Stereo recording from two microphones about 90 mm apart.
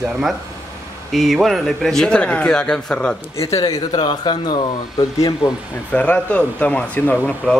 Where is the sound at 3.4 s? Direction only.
40° left (ahead or behind).